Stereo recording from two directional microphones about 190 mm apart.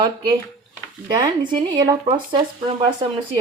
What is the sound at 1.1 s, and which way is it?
Speech, 25° right (ahead or behind).